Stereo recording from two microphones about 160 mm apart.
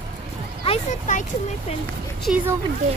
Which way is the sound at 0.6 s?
45° left (ahead or behind).